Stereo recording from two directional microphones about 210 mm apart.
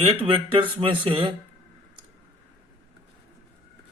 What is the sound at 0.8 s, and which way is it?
Speech, 25° right (ahead or behind).